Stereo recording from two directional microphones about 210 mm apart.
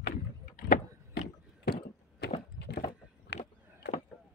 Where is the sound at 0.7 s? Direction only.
45° left (ahead or behind).